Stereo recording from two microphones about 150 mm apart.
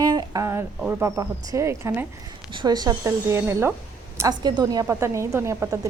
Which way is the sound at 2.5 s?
30° right (ahead or behind).